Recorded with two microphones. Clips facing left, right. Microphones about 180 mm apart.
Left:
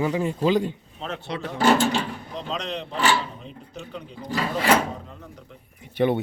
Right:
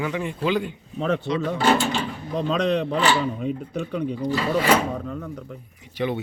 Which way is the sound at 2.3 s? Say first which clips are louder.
Right 10 dB; 60° right (ahead or behind).